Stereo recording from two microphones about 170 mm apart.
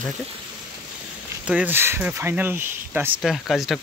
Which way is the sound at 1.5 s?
10° right (ahead or behind).